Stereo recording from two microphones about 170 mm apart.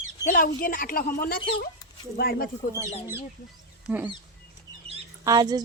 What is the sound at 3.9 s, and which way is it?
Speech, 10° right (ahead or behind).